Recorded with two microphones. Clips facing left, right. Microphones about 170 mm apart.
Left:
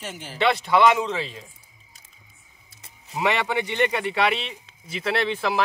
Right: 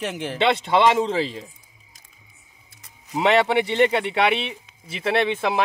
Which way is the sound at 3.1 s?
25° right (ahead or behind).